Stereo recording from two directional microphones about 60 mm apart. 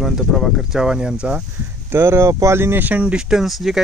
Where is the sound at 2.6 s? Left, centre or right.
Right.